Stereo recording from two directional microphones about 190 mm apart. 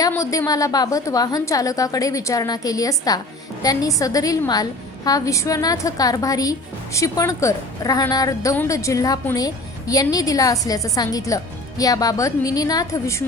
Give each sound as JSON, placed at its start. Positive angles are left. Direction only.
{"t": 0.0, "sound": "a woman's voice", "side_deg": 15}